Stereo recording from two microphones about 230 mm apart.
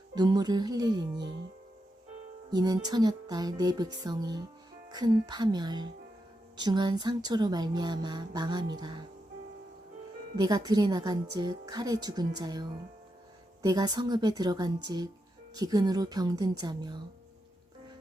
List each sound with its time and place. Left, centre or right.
0.1 s a woman's voice: centre
2.5 s a woman's voice: centre
10.3 s a woman's voice: centre